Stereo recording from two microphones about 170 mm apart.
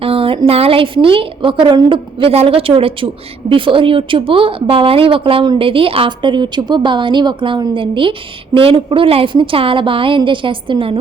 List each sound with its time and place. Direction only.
0.0 s a woman's voice: 35° right (ahead or behind)